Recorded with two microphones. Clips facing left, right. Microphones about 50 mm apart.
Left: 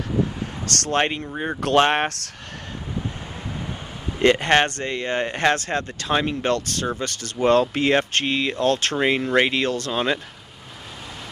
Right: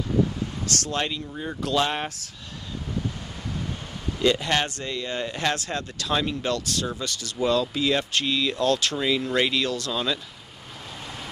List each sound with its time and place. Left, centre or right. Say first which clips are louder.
0.7 s speech: left 7 dB; left
4.2 s speech: left 6 dB; left